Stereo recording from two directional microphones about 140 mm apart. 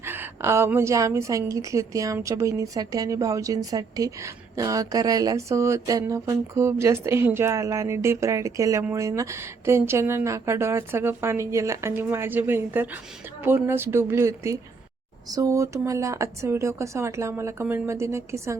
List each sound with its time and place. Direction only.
0.0 s a woman's voice: 15° right (ahead or behind)